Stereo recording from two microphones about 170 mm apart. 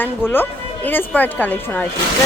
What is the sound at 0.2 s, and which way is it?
Speech, 15° left (ahead or behind).